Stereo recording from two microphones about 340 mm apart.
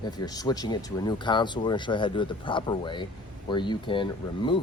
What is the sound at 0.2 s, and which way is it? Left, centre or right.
Speech, centre.